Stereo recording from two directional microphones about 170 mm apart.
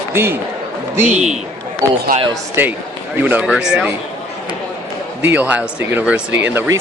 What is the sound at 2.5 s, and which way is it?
Speech, 10° right (ahead or behind).